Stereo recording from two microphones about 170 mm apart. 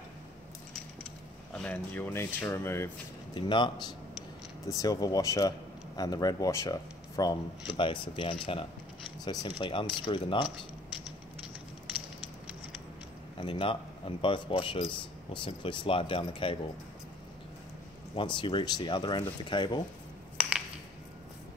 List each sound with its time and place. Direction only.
1.5 s speech: 5° left (ahead or behind)
3.3 s speech: 25° left (ahead or behind)
13.4 s speech: 30° left (ahead or behind)
18.1 s speech: 30° left (ahead or behind)
20.3 s a sound: 5° right (ahead or behind)